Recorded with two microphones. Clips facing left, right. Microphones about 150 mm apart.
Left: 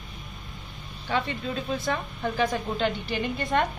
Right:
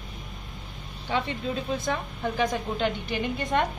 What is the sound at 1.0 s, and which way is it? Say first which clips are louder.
A woman's voice: even; 15° right (ahead or behind).